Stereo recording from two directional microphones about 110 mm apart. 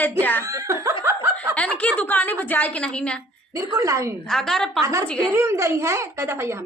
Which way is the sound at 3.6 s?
30° right (ahead or behind).